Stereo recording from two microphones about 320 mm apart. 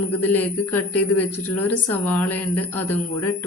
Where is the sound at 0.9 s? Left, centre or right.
Left.